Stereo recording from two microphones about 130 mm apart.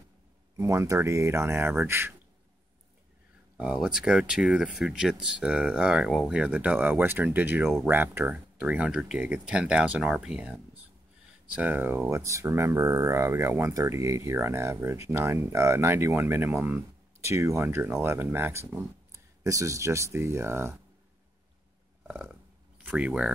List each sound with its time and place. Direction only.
0.6 s speech: 20° right (ahead or behind)
3.5 s speech: 5° right (ahead or behind)
22.0 s a sound: 10° right (ahead or behind)
22.8 s speech: 10° right (ahead or behind)